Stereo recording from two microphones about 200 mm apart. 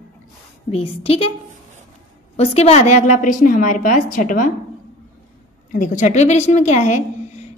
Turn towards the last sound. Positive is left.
turn(degrees=35)  # may be behind; listen again after turning